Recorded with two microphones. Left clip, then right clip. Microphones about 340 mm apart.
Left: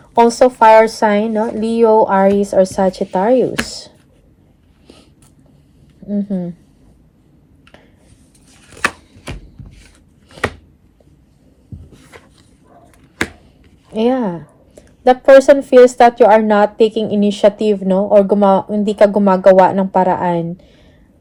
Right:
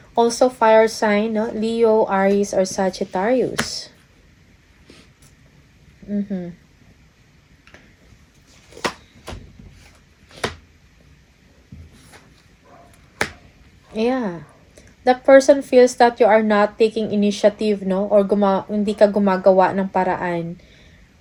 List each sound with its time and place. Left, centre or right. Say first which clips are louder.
0.2 s a woman's voice: left 7 dB; centre
13.9 s a woman's voice: left 5 dB; left